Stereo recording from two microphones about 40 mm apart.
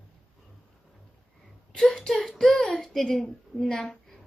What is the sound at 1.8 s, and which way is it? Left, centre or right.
Speech, centre.